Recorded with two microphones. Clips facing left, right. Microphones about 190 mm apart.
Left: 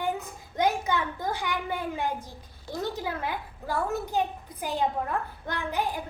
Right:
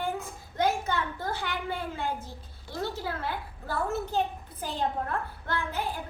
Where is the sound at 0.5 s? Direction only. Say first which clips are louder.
Left 2 dB; 15° left (ahead or behind).